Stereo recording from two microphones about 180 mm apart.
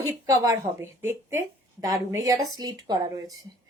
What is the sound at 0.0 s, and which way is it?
Speech, 15° right (ahead or behind).